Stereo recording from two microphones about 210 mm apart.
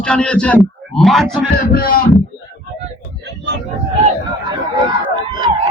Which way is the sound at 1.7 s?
45° left (ahead or behind).